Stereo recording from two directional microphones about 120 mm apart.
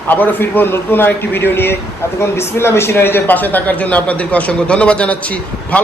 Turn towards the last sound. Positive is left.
turn(degrees=10)  # may be behind; listen again after turning